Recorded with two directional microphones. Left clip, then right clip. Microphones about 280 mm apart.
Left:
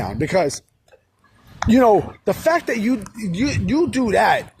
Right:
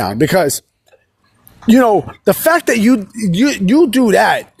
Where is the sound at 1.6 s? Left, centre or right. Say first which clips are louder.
Right 3 dB; right.